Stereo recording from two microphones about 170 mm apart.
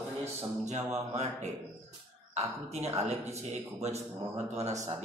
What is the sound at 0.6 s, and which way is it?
Speech, 40° right (ahead or behind).